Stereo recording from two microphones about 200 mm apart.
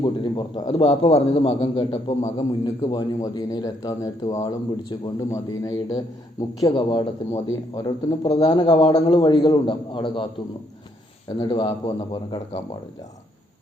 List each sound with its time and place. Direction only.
0.0 s a man's voice: 25° left (ahead or behind)
11.3 s a man's voice: 25° left (ahead or behind)